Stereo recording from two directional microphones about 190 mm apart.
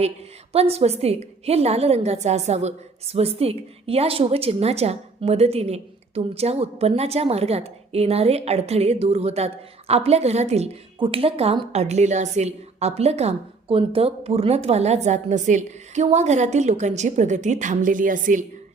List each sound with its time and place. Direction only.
0.5 s a woman's voice: 30° right (ahead or behind)